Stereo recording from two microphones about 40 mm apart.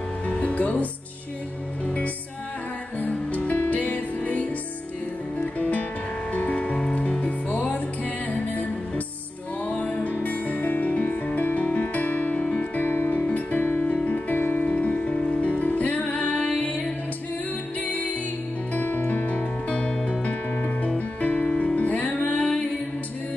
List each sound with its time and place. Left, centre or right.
0.3 s music: left
3.0 s music: left
9.8 s music: left
10.0 s music: left
14.4 s music: left
18.7 s music: left
19.7 s music: left
22.4 s music: left